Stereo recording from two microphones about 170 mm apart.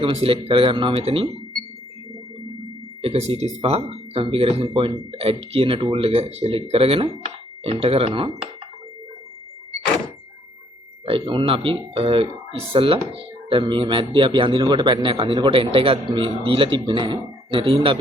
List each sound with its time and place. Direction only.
0.0 s speech: 35° right (ahead or behind)
3.0 s speech: 35° right (ahead or behind)
11.0 s speech: 30° right (ahead or behind)